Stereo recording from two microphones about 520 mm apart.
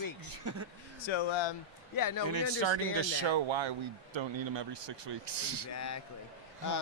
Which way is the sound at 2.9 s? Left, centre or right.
Right.